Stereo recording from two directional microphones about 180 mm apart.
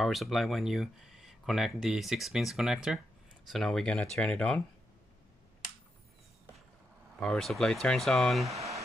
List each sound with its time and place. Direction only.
0.0 s speech: centre (ahead or behind)
7.2 s speech: 5° left (ahead or behind)
8.5 s speech: 15° right (ahead or behind)